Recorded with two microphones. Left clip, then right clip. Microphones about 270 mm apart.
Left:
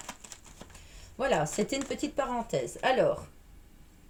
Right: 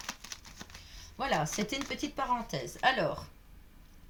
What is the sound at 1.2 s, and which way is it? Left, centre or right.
Speech, centre.